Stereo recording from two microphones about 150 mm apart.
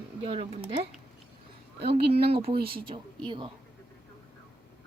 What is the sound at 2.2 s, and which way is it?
Speech, 40° right (ahead or behind).